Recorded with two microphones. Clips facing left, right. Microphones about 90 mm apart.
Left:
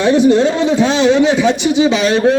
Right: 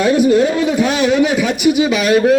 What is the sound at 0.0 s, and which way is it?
A man's voice, 25° left (ahead or behind).